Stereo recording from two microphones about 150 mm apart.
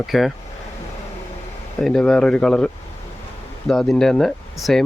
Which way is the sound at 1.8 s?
5° left (ahead or behind).